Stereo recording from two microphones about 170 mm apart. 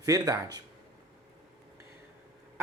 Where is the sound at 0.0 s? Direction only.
20° right (ahead or behind).